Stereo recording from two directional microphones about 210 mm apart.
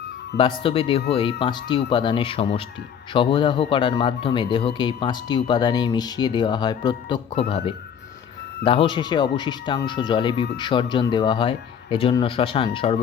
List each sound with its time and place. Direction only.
0.3 s speech: 25° left (ahead or behind)
8.6 s speech: 25° left (ahead or behind)